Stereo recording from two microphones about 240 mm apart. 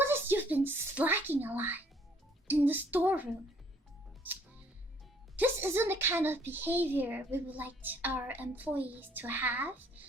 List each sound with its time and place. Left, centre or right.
0.0 s a sound: centre
2.5 s speech: centre
4.2 s music: centre
5.4 s a woman's voice: centre